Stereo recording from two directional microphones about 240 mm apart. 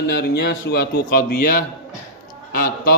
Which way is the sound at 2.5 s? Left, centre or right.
Left.